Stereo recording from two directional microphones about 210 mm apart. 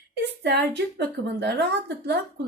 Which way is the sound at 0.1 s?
55° right (ahead or behind).